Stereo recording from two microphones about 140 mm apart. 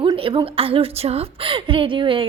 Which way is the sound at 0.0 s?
40° right (ahead or behind).